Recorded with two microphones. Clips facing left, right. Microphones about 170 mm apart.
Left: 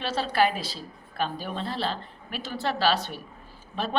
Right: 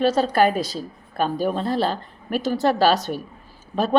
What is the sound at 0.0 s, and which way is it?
A woman's voice, 45° right (ahead or behind).